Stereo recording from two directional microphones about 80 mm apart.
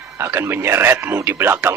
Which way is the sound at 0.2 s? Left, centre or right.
Right.